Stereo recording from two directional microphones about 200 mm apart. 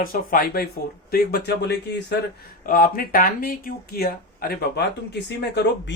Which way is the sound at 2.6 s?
45° left (ahead or behind).